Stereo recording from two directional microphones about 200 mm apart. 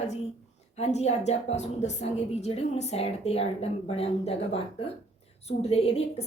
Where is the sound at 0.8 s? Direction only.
35° left (ahead or behind).